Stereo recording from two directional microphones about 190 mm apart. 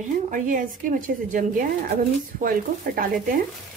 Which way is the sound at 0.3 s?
45° right (ahead or behind).